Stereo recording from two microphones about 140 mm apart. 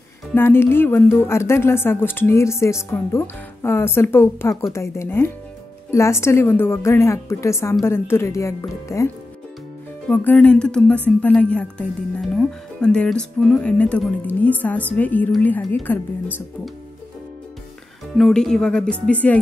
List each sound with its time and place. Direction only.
0.3 s a woman's voice: 15° left (ahead or behind)
18.1 s speech: 5° left (ahead or behind)